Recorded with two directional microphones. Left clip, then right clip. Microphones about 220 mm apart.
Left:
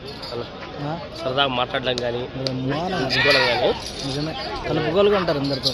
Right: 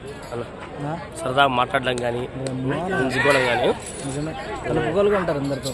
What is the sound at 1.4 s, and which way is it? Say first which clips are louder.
Speech: right 4 dB; 30° right (ahead or behind).